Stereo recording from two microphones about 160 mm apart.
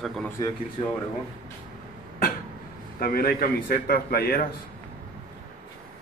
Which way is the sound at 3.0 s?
65° left (ahead or behind).